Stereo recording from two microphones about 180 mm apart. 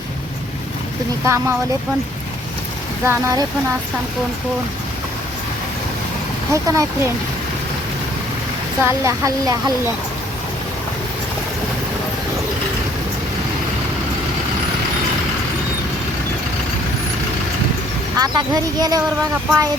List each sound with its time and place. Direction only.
1.2 s speech: 15° right (ahead or behind)
3.0 s speech: 15° right (ahead or behind)
6.5 s speech: 20° right (ahead or behind)
8.8 s speech: 15° right (ahead or behind)
18.2 s speech: 20° right (ahead or behind)